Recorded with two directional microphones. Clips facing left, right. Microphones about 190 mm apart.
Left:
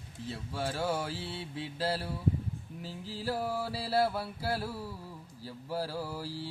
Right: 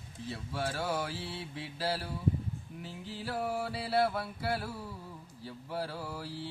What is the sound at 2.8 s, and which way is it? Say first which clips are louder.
Mantra: left 5 dB; 30° left (ahead or behind).